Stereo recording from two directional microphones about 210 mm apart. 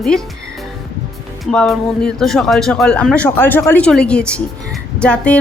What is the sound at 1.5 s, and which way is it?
A woman's voice, centre (ahead or behind).